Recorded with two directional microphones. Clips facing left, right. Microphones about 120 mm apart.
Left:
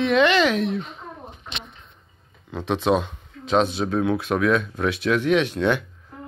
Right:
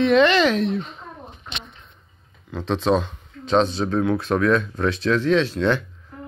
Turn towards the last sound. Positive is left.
turn(degrees=15)  # may be behind; listen again after turning